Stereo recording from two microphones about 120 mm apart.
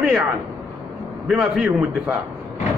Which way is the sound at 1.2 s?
5° right (ahead or behind).